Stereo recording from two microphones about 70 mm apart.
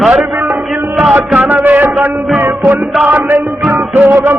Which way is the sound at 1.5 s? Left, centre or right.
Right.